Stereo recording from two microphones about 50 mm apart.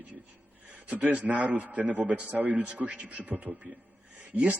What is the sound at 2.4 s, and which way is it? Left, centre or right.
A man's voice, right.